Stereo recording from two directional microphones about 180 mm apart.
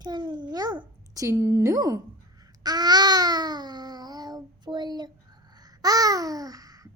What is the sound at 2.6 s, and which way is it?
Babbling, 20° right (ahead or behind).